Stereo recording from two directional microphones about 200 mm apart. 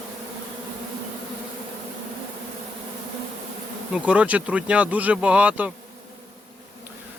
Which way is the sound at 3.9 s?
5° right (ahead or behind).